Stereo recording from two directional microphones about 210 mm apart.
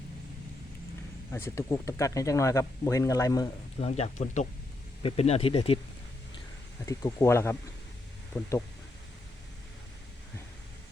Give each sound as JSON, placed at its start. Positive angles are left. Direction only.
{"t": 1.3, "sound": "speech", "side_deg": 15}
{"t": 3.8, "sound": "speech", "side_deg": 30}
{"t": 6.8, "sound": "speech", "side_deg": 15}